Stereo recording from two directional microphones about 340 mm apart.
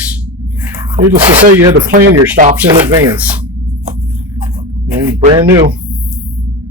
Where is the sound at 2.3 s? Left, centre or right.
Right.